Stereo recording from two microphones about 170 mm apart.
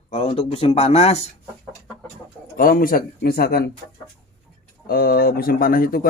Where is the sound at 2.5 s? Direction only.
55° left (ahead or behind).